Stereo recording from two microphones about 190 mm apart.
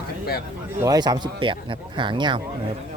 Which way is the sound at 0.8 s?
20° right (ahead or behind).